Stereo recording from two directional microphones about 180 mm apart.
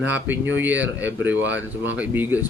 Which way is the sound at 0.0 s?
10° right (ahead or behind).